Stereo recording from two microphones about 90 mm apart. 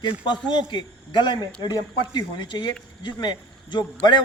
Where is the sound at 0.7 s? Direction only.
55° left (ahead or behind).